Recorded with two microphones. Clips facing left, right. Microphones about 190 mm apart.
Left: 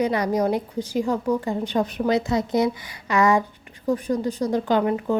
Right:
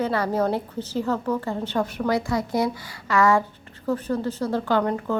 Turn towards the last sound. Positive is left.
turn(degrees=15)  # may be behind; listen again after turning